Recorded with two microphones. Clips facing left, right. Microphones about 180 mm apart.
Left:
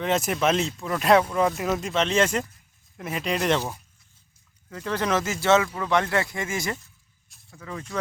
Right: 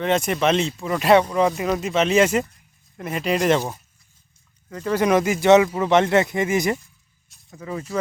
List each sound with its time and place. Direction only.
0.0 s speech: centre (ahead or behind)
4.8 s speech: 10° right (ahead or behind)